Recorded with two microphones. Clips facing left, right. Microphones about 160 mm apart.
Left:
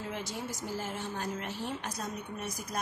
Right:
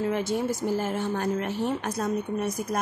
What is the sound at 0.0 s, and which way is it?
Speech, 60° right (ahead or behind).